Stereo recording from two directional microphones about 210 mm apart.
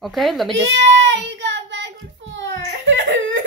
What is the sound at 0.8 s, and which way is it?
Child singing, 60° right (ahead or behind).